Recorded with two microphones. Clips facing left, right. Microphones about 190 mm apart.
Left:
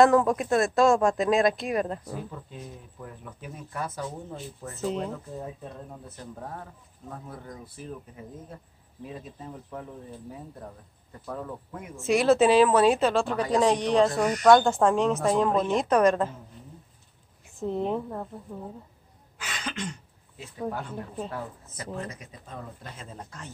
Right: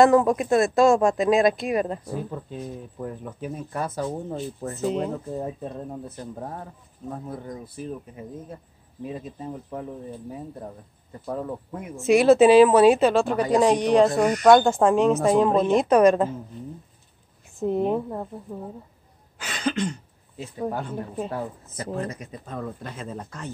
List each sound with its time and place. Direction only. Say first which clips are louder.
0.0 s speech: right 3 dB; 10° right (ahead or behind)
2.3 s speech: right 8 dB; 35° right (ahead or behind)
9.0 s speech: right 6 dB; 25° right (ahead or behind)
11.2 s speech: right 6 dB; 25° right (ahead or behind)
12.1 s a woman's voice: right 5 dB; 10° right (ahead or behind)
17.6 s a woman's voice: right 5 dB; 10° right (ahead or behind)
19.3 s cough: right 9 dB; 35° right (ahead or behind)
21.3 s speech: right 5 dB; 30° right (ahead or behind)
21.9 s speech: right 6 dB; 45° right (ahead or behind)
22.6 s speech: right 9 dB; 75° right (ahead or behind)